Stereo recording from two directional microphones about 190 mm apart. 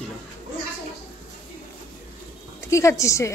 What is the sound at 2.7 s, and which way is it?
Speech, 15° left (ahead or behind).